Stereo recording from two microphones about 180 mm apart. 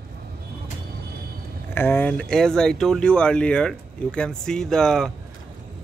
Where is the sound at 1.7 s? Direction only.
10° left (ahead or behind).